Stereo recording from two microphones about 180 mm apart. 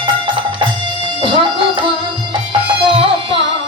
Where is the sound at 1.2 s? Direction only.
30° right (ahead or behind).